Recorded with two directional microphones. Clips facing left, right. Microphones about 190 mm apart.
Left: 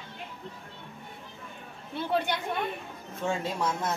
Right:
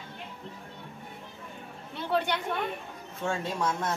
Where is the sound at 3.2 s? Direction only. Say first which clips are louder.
Even; 10° left (ahead or behind).